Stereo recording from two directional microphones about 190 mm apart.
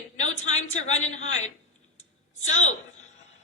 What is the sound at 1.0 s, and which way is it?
Speech, 90° left.